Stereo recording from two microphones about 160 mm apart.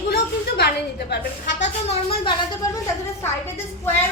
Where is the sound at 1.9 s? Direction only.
35° left (ahead or behind).